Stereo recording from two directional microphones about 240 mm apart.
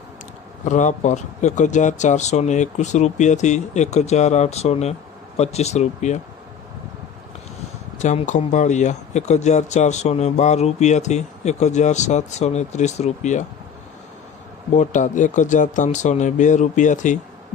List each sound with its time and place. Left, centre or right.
0.6 s speech: left
7.9 s speech: left
14.8 s speech: left